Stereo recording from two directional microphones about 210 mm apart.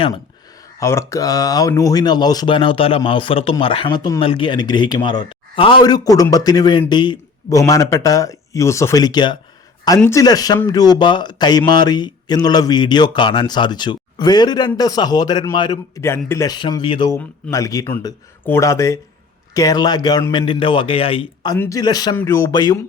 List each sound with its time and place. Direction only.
0.8 s speech: 15° left (ahead or behind)